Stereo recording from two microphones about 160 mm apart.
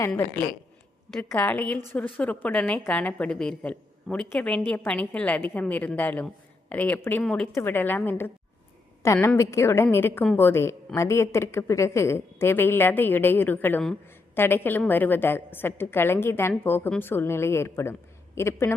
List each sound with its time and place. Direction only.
1.2 s a woman's voice: 10° left (ahead or behind)